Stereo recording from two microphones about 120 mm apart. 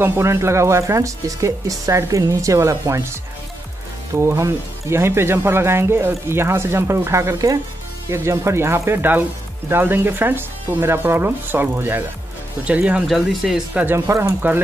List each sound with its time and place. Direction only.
0.0 s speech: 20° right (ahead or behind); by 13.8 s centre (ahead or behind)
13.8 s speech: 20° right (ahead or behind)